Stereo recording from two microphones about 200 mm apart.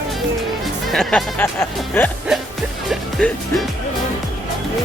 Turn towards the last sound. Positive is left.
turn(degrees=0)  # may be behind; listen again after turning